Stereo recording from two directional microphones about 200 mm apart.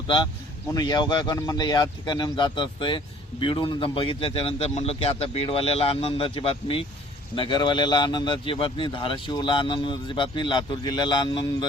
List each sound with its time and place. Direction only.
0.7 s speech: 20° left (ahead or behind)